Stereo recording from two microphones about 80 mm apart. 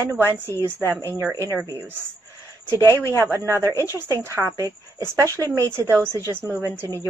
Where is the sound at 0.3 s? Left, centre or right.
Right.